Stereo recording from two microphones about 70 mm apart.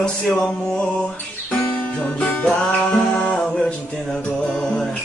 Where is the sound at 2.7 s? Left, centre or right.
Left.